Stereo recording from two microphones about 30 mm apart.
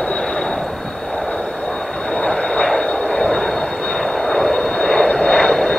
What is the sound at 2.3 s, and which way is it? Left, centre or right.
Vehicle, left.